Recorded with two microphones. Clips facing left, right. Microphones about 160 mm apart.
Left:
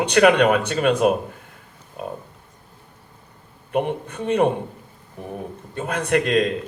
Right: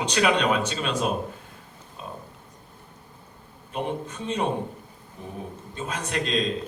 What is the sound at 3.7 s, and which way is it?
Speech, 60° left (ahead or behind).